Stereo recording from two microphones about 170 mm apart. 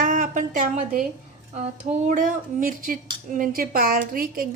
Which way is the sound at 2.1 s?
55° right (ahead or behind).